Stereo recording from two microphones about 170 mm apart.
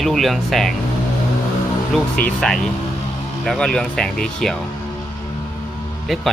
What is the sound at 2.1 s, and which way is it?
Speech, 5° left (ahead or behind).